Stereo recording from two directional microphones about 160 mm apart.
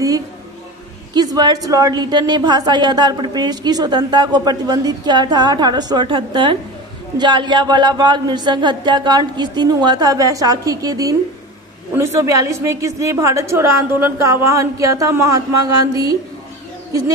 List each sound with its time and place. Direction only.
1.1 s a woman's voice: 25° right (ahead or behind)